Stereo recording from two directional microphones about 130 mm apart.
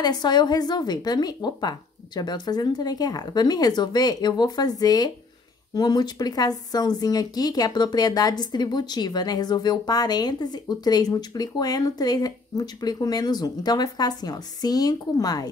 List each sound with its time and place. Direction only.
0.0 s speech: 35° left (ahead or behind)